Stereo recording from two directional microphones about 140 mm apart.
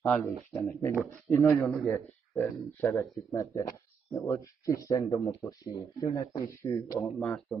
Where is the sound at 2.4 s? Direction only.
20° left (ahead or behind).